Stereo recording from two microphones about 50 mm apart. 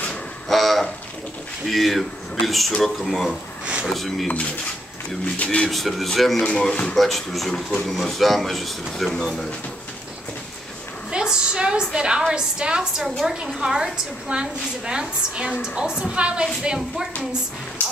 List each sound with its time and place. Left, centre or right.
0.5 s a sound: centre
1.7 s a man's voice: centre
3.6 s speech: right
3.9 s a man's voice: centre
5.2 s speech: left
5.7 s a man's voice: centre
7.0 s a man's voice: centre
11.1 s a woman's voice: centre